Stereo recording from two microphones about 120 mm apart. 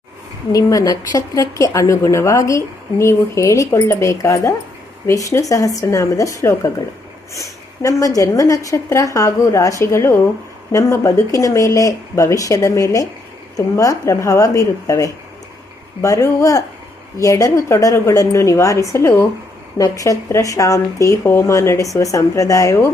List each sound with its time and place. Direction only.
0.5 s a woman's voice: 30° left (ahead or behind)